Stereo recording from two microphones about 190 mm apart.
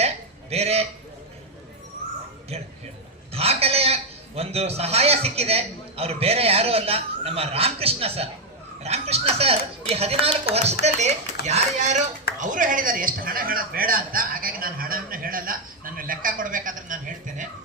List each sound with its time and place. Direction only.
0.5 s a man's voice: 35° right (ahead or behind)
2.5 s a man's voice: 35° right (ahead or behind)
3.3 s a sound: 30° right (ahead or behind)
4.4 s a man's voice: 30° right (ahead or behind)